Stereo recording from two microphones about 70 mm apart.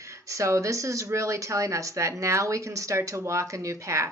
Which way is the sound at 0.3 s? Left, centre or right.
Right.